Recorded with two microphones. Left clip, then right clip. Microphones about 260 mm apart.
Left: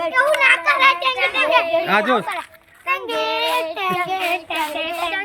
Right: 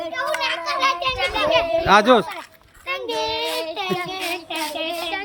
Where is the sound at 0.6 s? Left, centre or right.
Centre.